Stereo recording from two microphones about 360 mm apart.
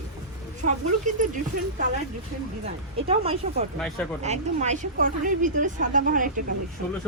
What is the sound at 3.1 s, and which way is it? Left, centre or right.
Speech, centre.